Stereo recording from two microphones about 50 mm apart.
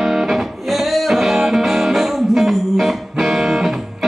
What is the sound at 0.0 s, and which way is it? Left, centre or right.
Music, centre.